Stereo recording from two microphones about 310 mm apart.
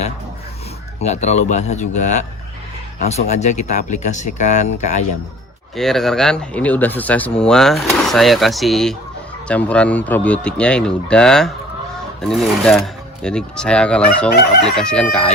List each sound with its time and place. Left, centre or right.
0.9 s speech: left
5.7 s speech: centre